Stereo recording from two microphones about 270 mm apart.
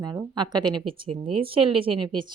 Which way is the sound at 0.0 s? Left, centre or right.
Centre.